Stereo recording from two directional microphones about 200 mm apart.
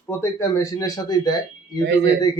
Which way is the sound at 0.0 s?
15° left (ahead or behind).